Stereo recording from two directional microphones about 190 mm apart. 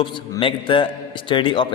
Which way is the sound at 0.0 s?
25° left (ahead or behind).